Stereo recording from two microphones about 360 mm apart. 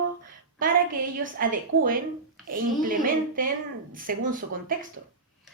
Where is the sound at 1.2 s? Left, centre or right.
Right.